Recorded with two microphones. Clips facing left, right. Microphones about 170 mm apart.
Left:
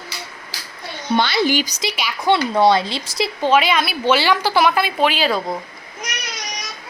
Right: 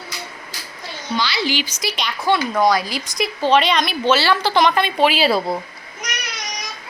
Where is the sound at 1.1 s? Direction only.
50° left (ahead or behind).